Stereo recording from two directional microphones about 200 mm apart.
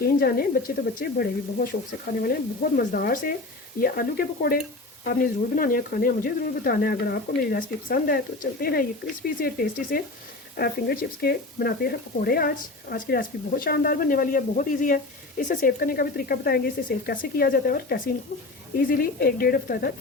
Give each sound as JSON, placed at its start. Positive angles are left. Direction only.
{"t": 0.0, "sound": "speech", "side_deg": 50}
{"t": 2.7, "sound": "speech", "side_deg": 45}